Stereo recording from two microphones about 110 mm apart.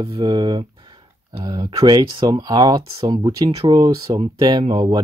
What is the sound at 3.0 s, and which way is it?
Speech, 50° right (ahead or behind).